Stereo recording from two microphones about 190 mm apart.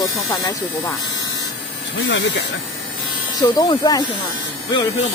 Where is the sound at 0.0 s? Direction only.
20° left (ahead or behind).